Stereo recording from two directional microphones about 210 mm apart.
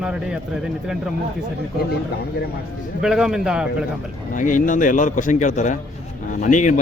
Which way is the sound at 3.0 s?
Centre (ahead or behind).